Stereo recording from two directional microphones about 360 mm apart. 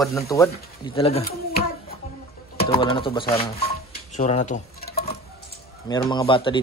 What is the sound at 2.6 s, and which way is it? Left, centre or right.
Speech, centre.